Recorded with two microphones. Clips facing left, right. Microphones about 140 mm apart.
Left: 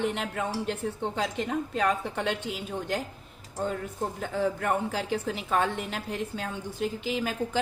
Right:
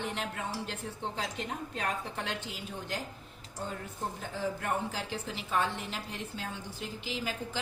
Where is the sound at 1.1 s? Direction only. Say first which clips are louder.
Left 8 dB; 80° left.